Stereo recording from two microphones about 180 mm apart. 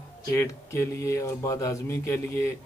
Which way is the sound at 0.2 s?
20° left (ahead or behind).